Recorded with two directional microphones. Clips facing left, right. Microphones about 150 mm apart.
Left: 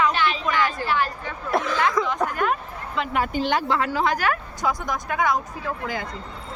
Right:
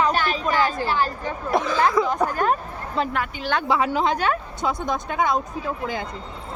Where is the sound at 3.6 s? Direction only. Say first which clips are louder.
Right 2 dB; 15° right (ahead or behind).